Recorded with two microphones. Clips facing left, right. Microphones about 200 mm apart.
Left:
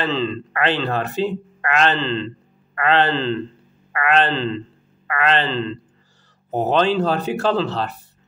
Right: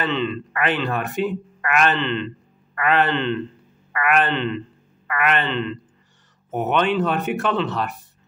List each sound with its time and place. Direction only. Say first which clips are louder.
0.0 s speech: left 1 dB; 35° left (ahead or behind)